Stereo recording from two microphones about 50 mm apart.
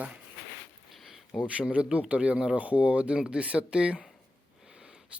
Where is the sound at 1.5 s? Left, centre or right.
Right.